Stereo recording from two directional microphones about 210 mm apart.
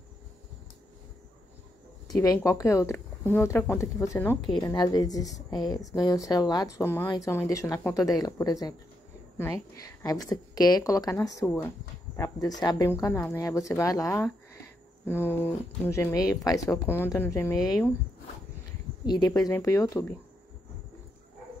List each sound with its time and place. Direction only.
2.0 s speech: 15° left (ahead or behind)
19.0 s speech: 20° left (ahead or behind)